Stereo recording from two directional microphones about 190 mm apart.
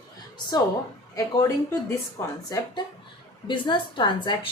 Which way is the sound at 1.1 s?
15° left (ahead or behind).